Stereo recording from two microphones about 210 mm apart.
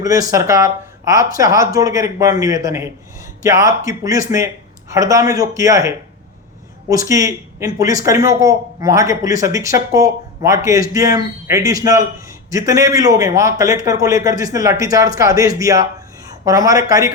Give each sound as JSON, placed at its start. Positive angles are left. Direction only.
{"t": 0.0, "sound": "speech", "side_deg": -15}